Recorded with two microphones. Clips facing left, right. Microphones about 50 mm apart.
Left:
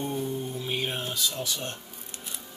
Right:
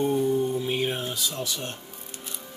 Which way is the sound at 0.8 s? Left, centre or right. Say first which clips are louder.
Right 2 dB; centre.